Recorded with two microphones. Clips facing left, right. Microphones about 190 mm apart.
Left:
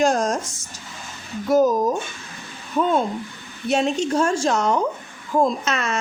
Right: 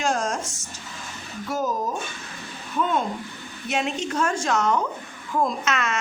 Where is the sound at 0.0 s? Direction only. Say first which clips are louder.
Left 6 dB; 35° left (ahead or behind).